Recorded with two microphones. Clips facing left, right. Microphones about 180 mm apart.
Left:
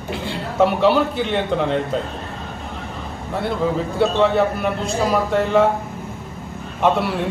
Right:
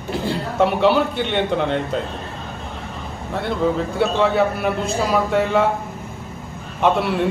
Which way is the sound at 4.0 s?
Centre (ahead or behind).